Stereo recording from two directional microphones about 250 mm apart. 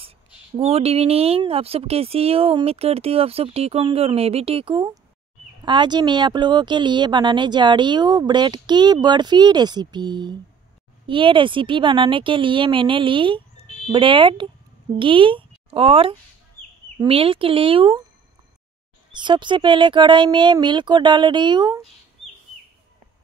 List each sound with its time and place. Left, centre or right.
0.6 s a woman's voice: right
19.1 s speech: centre